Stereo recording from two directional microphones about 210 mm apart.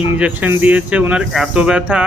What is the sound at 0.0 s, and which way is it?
Speech, 5° right (ahead or behind).